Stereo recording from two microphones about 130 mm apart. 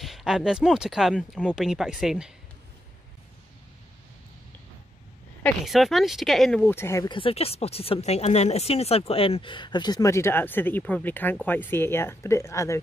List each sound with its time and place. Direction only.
0.0 s speech: 5° right (ahead or behind)
5.6 s speech: centre (ahead or behind)
6.6 s speech: 20° left (ahead or behind)
7.1 s speech: 45° left (ahead or behind); by 12.7 s 25° left (ahead or behind)